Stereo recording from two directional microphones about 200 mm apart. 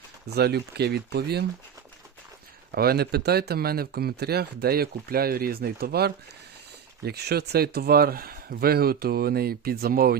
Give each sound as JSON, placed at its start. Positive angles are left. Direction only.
{"t": 0.3, "sound": "speech", "side_deg": -55}
{"t": 2.7, "sound": "speech", "side_deg": -50}